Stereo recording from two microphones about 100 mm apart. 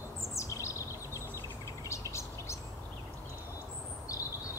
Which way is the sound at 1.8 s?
30° left (ahead or behind).